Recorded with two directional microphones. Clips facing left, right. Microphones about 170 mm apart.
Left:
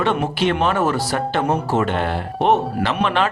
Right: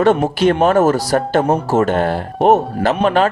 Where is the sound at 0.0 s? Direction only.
40° right (ahead or behind).